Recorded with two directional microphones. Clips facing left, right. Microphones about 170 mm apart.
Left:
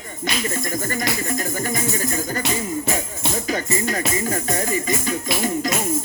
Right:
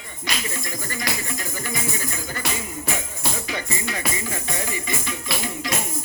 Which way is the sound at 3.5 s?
45° left (ahead or behind).